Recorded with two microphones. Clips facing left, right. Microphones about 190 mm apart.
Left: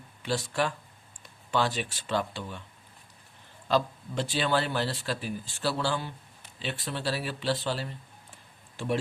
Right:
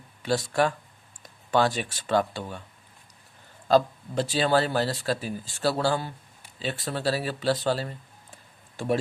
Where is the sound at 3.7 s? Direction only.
40° right (ahead or behind).